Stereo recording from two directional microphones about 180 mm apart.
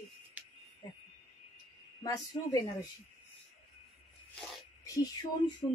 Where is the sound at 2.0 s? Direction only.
20° left (ahead or behind).